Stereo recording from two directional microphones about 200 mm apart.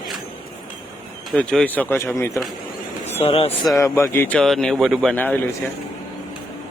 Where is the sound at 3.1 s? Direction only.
30° left (ahead or behind).